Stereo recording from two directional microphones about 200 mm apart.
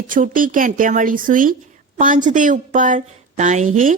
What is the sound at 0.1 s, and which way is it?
A woman's voice, 40° right (ahead or behind).